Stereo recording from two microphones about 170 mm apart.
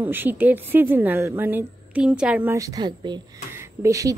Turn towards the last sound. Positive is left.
turn(degrees=-20)  # may be behind; listen again after turning